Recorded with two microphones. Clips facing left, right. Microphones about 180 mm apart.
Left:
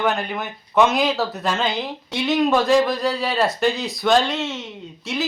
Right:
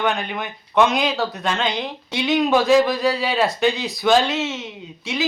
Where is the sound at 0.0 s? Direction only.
Centre (ahead or behind).